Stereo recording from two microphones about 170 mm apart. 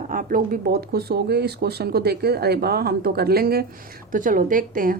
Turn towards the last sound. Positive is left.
turn(degrees=-55)  # may be behind; listen again after turning